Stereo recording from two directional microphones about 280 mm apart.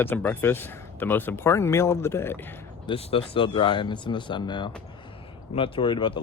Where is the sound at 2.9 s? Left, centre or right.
Centre.